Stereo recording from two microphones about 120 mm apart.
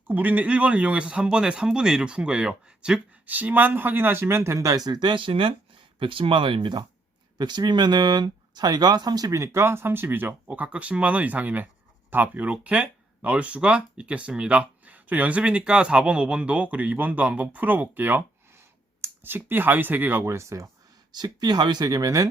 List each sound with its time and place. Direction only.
0.1 s speech: 15° right (ahead or behind)
4.9 s speech: 40° right (ahead or behind)
21.1 s speech: 35° right (ahead or behind)